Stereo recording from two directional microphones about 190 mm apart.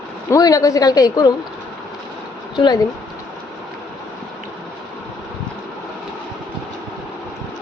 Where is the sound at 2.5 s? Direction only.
20° left (ahead or behind).